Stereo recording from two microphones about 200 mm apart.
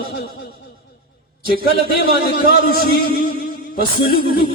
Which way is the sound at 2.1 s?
50° left (ahead or behind).